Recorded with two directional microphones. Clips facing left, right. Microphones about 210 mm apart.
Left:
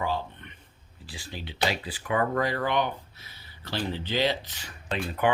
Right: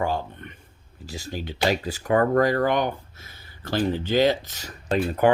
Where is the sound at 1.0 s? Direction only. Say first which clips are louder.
Right 7 dB; 45° right (ahead or behind).